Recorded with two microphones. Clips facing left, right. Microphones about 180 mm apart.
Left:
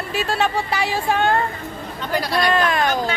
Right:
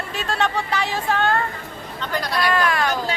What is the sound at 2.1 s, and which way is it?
Speech, 5° left (ahead or behind).